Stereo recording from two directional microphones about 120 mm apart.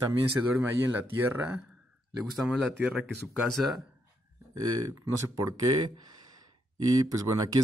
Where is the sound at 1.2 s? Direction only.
15° right (ahead or behind).